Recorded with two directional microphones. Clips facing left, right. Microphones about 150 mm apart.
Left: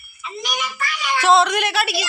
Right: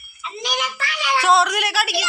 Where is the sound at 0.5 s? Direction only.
75° right (ahead or behind).